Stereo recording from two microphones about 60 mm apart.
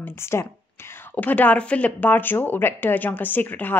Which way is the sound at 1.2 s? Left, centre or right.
Left.